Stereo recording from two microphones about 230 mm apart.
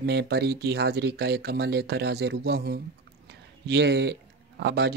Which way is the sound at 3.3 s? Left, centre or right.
Right.